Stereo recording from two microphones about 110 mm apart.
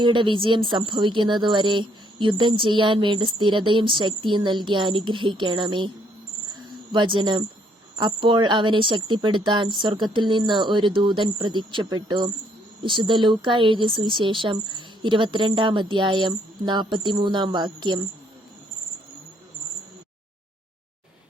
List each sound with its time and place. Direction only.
0.0 s a woman's voice: 45° right (ahead or behind)
6.5 s cricket: 45° right (ahead or behind)
7.9 s a woman's voice: 45° right (ahead or behind)